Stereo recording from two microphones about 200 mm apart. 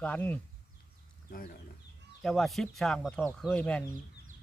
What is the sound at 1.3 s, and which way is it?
Speech, 45° left (ahead or behind).